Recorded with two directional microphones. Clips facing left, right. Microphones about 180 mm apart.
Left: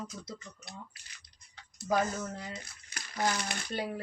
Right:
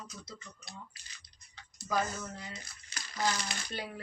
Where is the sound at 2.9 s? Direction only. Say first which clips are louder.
Left 2 dB; 60° left (ahead or behind).